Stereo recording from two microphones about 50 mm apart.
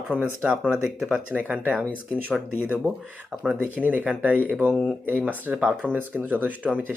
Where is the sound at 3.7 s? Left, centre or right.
Right.